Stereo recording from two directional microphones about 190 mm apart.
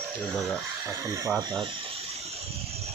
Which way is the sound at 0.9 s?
15° right (ahead or behind).